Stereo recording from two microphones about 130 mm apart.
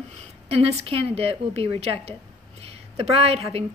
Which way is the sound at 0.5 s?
50° right (ahead or behind).